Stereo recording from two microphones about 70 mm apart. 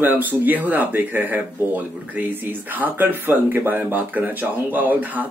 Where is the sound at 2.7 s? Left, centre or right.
Right.